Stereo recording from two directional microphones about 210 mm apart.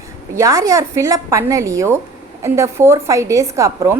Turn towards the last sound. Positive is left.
turn(degrees=-15)  # may be behind; listen again after turning